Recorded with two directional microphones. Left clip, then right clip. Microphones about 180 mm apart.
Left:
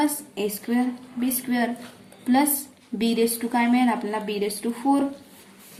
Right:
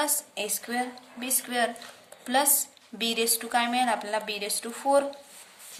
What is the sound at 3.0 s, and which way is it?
A woman's voice, 30° right (ahead or behind).